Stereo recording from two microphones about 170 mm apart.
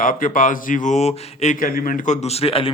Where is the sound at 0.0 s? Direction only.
50° left (ahead or behind).